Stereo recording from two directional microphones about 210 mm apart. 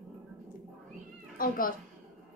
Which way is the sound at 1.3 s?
40° left (ahead or behind).